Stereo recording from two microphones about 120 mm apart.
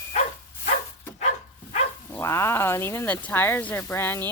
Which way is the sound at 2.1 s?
25° left (ahead or behind).